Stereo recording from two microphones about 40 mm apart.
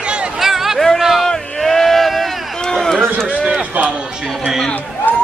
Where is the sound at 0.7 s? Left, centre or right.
Centre.